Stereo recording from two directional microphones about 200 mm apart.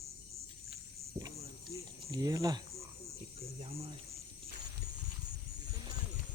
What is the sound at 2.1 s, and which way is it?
Speech, 15° right (ahead or behind).